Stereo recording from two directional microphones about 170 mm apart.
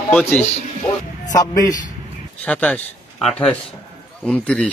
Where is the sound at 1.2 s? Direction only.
20° left (ahead or behind).